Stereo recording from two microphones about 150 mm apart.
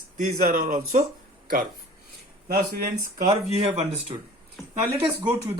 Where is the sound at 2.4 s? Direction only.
80° right.